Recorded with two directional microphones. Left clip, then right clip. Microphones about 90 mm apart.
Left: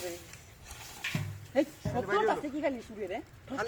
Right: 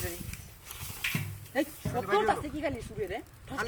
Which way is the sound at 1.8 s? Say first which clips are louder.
Right 1 dB; 35° right (ahead or behind).